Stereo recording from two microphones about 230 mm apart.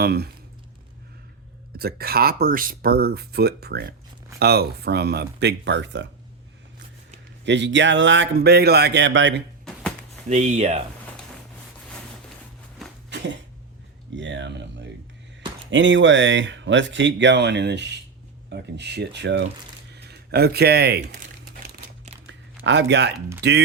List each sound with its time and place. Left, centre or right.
0.0 s speech: right
1.7 s speech: right
7.4 s speech: right
10.2 s speech: right
13.1 s a sound: right
14.2 s speech: right
21.6 s crumpling: right
22.3 s a sound: right
23.4 s speech: right